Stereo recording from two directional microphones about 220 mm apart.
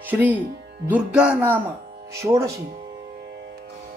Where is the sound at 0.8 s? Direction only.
5° right (ahead or behind).